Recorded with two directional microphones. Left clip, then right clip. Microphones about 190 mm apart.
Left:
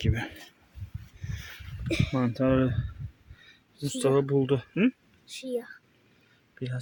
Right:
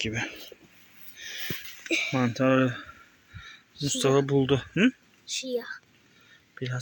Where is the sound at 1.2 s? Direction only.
10° left (ahead or behind).